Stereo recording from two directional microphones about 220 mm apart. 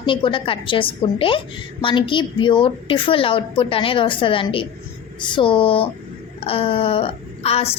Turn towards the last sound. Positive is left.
turn(degrees=25)  # may be behind; listen again after turning